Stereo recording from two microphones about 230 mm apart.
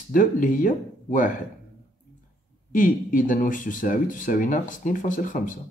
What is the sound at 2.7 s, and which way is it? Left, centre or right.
Speech, left.